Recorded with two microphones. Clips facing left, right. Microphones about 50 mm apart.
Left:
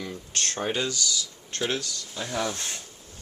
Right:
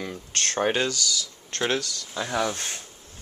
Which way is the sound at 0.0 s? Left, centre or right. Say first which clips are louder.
Right 2 dB; right.